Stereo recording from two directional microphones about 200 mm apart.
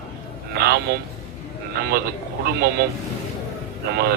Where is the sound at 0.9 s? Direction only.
55° right (ahead or behind).